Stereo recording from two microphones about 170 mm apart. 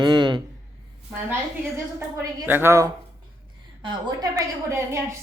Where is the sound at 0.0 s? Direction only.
25° right (ahead or behind).